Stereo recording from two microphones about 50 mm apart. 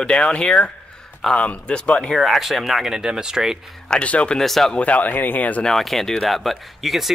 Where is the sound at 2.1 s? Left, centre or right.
Centre.